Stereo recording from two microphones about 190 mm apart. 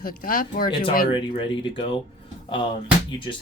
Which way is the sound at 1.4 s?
25° left (ahead or behind).